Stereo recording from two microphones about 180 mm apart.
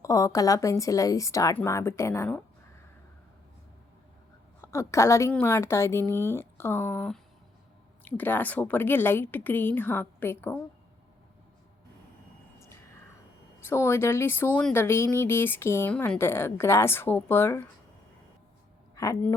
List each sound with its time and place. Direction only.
0.0 s speech: 20° left (ahead or behind)
4.6 s speech: 15° left (ahead or behind)
13.7 s speech: 15° left (ahead or behind)
18.9 s speech: 15° left (ahead or behind)